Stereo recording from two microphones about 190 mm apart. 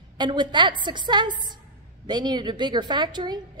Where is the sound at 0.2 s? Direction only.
25° right (ahead or behind).